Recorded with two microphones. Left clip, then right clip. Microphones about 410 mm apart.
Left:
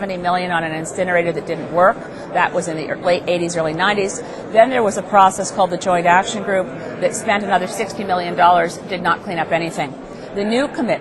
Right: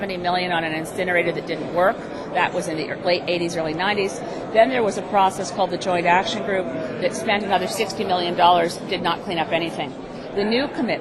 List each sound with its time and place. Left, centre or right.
0.0 s a woman's voice: left